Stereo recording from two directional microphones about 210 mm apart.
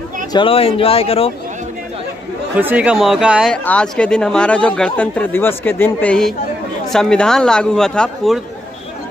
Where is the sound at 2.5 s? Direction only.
5° right (ahead or behind).